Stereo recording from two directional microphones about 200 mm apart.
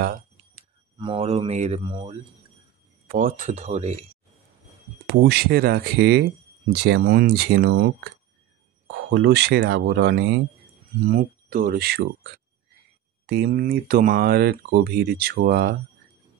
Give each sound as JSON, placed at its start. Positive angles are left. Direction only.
{"t": 0.9, "sound": "speech", "side_deg": -25}
{"t": 3.1, "sound": "speech", "side_deg": -45}
{"t": 5.0, "sound": "speech", "side_deg": -55}
{"t": 11.1, "sound": "speech", "side_deg": -45}
{"t": 13.3, "sound": "speech", "side_deg": -50}